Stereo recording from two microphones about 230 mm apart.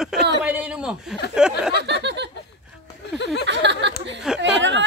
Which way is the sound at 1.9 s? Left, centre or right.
Right.